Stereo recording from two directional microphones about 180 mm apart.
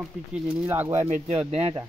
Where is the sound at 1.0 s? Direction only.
35° right (ahead or behind).